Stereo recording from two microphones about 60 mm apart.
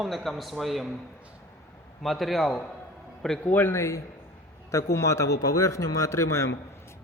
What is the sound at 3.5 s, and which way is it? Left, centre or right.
Speech, left.